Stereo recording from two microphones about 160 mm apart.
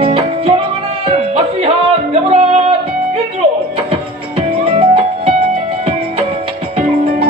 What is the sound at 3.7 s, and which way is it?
Music, 35° right (ahead or behind).